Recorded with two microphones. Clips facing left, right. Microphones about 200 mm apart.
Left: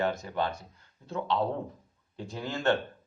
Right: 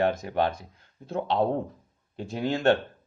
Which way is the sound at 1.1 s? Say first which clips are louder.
Right 4 dB; 50° right (ahead or behind).